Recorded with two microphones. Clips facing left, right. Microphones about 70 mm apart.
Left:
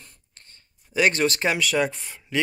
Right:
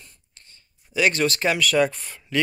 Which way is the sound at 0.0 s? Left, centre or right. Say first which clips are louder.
Even; left.